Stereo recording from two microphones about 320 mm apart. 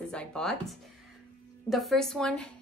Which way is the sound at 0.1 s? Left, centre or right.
Centre.